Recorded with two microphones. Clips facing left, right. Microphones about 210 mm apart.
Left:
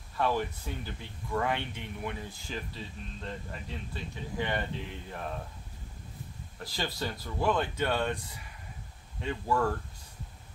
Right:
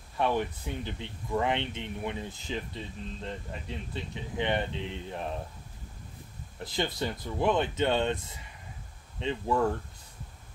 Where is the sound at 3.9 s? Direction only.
20° right (ahead or behind).